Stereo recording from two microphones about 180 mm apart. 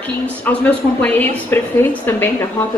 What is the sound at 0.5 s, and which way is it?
A woman's voice, 10° left (ahead or behind).